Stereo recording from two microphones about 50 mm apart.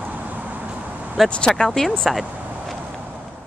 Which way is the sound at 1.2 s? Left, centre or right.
Centre.